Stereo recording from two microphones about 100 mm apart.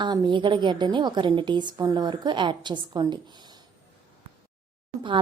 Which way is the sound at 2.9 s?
40° right (ahead or behind).